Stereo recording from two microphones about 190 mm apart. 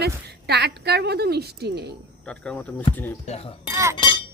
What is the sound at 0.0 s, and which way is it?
A woman's voice, 60° right (ahead or behind).